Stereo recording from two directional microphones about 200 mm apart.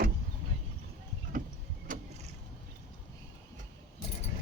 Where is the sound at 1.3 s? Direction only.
45° right (ahead or behind).